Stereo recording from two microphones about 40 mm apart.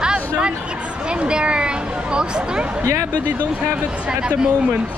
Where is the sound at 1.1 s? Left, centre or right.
Right.